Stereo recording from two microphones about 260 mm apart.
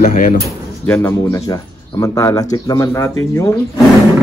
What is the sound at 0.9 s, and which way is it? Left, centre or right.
Speech, centre.